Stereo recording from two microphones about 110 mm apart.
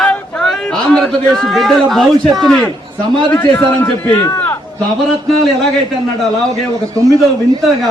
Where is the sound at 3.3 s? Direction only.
15° left (ahead or behind).